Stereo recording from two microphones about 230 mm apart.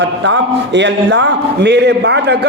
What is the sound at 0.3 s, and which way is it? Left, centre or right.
A man's voice, right.